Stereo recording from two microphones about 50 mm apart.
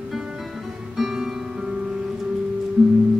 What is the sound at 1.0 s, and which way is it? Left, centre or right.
Music, centre.